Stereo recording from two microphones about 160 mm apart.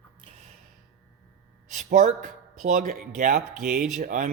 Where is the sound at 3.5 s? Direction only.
5° right (ahead or behind).